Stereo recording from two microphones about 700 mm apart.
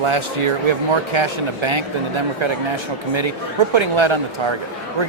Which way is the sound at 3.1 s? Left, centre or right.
Right.